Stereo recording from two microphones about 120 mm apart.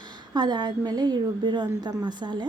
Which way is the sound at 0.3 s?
35° right (ahead or behind).